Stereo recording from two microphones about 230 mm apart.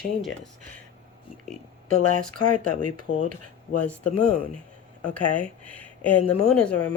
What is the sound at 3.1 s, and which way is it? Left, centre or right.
Speech, left.